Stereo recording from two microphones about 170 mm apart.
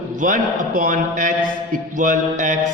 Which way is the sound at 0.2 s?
50° right (ahead or behind).